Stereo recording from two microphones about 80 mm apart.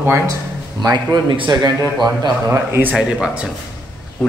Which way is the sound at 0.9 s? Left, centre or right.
Right.